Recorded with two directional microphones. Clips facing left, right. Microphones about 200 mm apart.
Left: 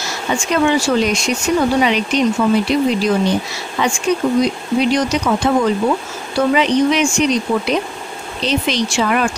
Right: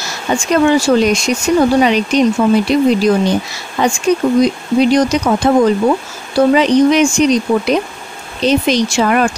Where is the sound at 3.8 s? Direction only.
40° right (ahead or behind).